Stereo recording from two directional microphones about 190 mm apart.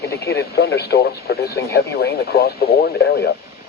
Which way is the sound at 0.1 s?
55° left (ahead or behind).